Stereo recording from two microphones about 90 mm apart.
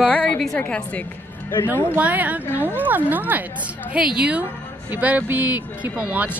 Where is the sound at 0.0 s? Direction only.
15° left (ahead or behind).